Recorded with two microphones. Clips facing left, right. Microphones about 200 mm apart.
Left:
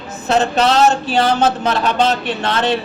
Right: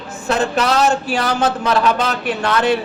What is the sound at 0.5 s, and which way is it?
A man's voice, 30° left (ahead or behind).